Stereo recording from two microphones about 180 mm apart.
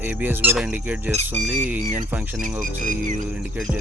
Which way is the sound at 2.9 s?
45° right (ahead or behind).